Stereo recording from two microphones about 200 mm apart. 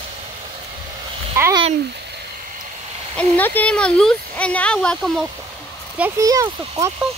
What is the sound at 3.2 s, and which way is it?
Speech, 10° left (ahead or behind).